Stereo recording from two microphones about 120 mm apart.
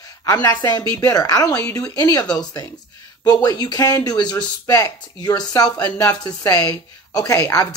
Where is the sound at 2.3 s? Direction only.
30° left (ahead or behind).